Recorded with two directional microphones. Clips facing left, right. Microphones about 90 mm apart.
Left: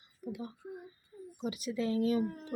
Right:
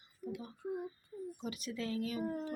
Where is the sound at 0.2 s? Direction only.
5° left (ahead or behind).